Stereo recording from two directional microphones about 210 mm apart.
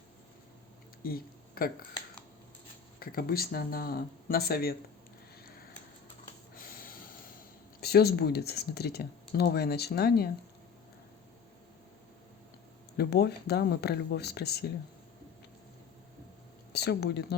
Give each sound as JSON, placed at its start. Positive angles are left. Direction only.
{"t": 1.0, "sound": "speech", "side_deg": 45}
{"t": 3.0, "sound": "speech", "side_deg": 45}
{"t": 6.5, "sound": "snort", "side_deg": 45}
{"t": 7.8, "sound": "speech", "side_deg": 50}
{"t": 13.0, "sound": "speech", "side_deg": 50}
{"t": 16.7, "sound": "speech", "side_deg": 50}